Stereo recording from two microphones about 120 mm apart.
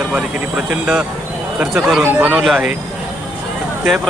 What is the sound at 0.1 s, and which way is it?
Speech, 10° right (ahead or behind).